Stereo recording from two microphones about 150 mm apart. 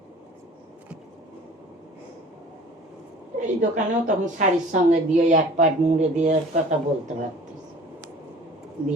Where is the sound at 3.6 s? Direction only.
55° right (ahead or behind).